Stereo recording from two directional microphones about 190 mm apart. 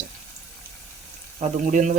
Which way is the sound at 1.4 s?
40° right (ahead or behind).